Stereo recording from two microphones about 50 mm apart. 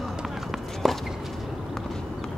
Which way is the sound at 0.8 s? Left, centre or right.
Centre.